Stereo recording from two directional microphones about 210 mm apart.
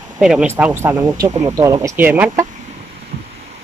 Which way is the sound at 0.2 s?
5° right (ahead or behind).